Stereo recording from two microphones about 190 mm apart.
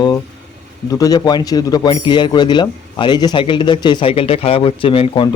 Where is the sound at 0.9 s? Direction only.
20° left (ahead or behind).